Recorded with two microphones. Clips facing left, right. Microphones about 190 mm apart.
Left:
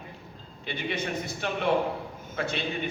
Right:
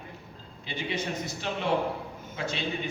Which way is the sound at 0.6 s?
60° left (ahead or behind).